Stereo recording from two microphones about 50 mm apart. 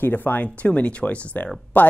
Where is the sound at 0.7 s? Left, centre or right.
Left.